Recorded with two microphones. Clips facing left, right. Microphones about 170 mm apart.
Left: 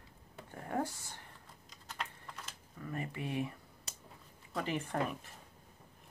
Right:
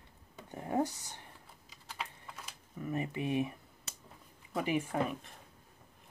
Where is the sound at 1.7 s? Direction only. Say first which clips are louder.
Even; 5° right (ahead or behind).